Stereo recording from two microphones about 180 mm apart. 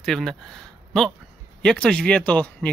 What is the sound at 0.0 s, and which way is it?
Speech, 5° left (ahead or behind).